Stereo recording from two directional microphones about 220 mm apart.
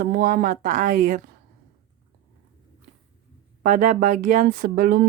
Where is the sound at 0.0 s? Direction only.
40° right (ahead or behind).